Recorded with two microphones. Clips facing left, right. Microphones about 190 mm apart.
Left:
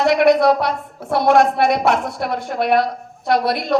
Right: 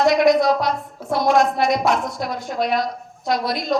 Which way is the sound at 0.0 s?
60° left (ahead or behind).